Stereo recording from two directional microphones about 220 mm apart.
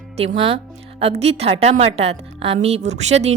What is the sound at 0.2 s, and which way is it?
A woman's voice, 25° right (ahead or behind).